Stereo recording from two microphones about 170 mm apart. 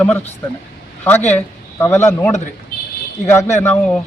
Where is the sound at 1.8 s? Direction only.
15° left (ahead or behind).